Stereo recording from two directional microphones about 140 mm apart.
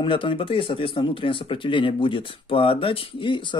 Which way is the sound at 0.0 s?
35° left (ahead or behind).